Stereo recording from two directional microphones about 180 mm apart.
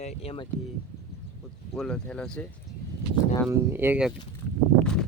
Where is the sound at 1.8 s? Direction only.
5° left (ahead or behind).